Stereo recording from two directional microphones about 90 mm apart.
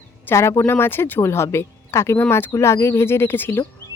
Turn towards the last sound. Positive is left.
turn(degrees=25)  # may be behind; listen again after turning